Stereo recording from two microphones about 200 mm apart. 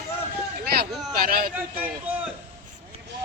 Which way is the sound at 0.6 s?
50° right (ahead or behind).